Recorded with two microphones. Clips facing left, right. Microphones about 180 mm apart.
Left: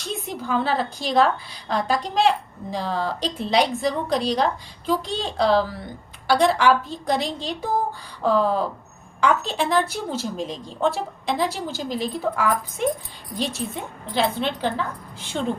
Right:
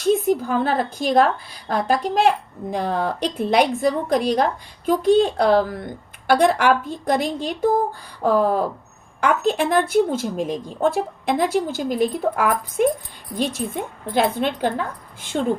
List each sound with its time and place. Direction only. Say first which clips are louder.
0.0 s a woman's voice: right 12 dB; 50° right (ahead or behind)